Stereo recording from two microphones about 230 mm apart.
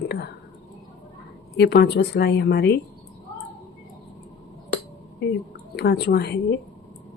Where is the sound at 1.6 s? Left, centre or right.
Left.